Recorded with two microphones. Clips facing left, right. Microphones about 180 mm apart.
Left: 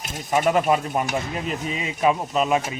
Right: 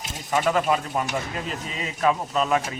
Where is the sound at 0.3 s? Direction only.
20° left (ahead or behind).